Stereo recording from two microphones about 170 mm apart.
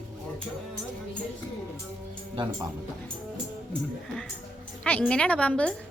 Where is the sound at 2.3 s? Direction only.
25° right (ahead or behind).